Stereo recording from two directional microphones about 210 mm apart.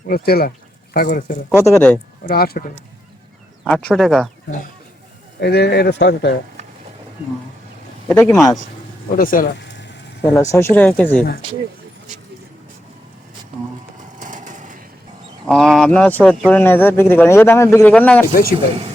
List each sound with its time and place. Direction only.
0.1 s speech: 45° left (ahead or behind)
1.6 s speech: 10° left (ahead or behind)
2.2 s speech: 45° left (ahead or behind)
3.6 s speech: 5° left (ahead or behind)
5.4 s speech: 50° left (ahead or behind)
8.1 s speech: 5° left (ahead or behind)
9.1 s a sound: 40° left (ahead or behind)
10.3 s speech: 15° left (ahead or behind)
14.2 s a sound: 35° right (ahead or behind)
15.4 s speech: centre (ahead or behind)
18.5 s speech: 25° right (ahead or behind)